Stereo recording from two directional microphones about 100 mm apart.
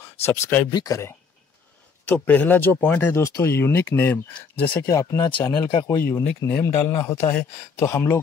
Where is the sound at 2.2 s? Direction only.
15° left (ahead or behind).